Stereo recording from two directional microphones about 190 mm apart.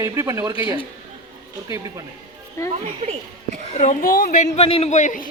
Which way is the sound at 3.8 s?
50° left (ahead or behind).